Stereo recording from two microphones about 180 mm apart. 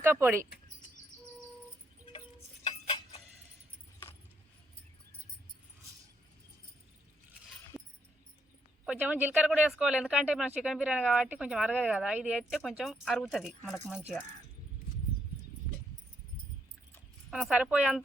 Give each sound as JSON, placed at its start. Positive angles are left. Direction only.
{"t": 0.0, "sound": "speech", "side_deg": -15}
{"t": 2.6, "sound": "music", "side_deg": 30}
{"t": 7.7, "sound": "a sound", "side_deg": 5}
{"t": 8.9, "sound": "speech", "side_deg": -10}
{"t": 17.3, "sound": "speech", "side_deg": -5}